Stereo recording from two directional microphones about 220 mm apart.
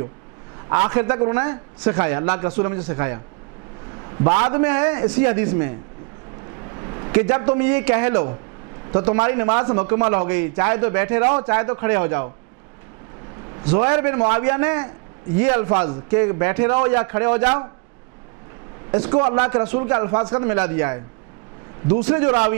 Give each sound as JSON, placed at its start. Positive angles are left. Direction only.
{"t": 0.7, "sound": "a man's voice", "side_deg": -20}
{"t": 6.6, "sound": "a sound", "side_deg": -20}
{"t": 7.4, "sound": "speech", "side_deg": -10}
{"t": 8.8, "sound": "a sound", "side_deg": -10}
{"t": 9.2, "sound": "speech", "side_deg": -15}
{"t": 13.7, "sound": "speech", "side_deg": -10}
{"t": 18.9, "sound": "a man's voice", "side_deg": -10}
{"t": 19.5, "sound": "a man's voice", "side_deg": -10}
{"t": 22.0, "sound": "speech", "side_deg": -10}
{"t": 22.3, "sound": "a man's voice", "side_deg": -20}